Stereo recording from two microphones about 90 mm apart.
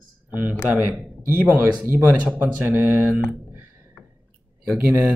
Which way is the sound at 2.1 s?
15° right (ahead or behind).